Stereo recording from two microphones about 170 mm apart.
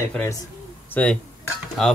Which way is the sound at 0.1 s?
15° left (ahead or behind).